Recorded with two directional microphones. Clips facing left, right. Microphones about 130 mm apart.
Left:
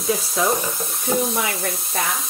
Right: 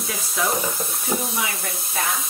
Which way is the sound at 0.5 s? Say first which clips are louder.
Left 2 dB; centre (ahead or behind).